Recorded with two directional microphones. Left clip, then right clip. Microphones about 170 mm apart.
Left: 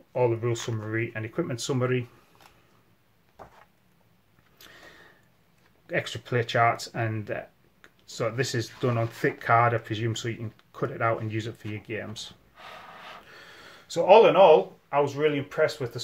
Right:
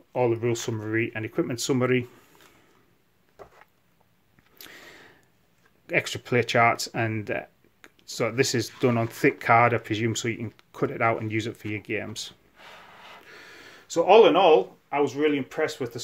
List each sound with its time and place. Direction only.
0.1 s speech: 40° right (ahead or behind)
4.6 s a sound: 40° right (ahead or behind)
5.9 s speech: 35° right (ahead or behind)
13.2 s speech: 30° right (ahead or behind)